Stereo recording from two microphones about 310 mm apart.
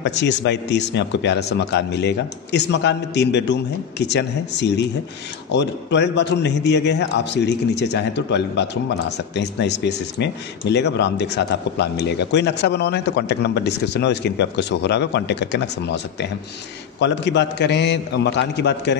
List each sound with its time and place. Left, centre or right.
0.0 s speech: left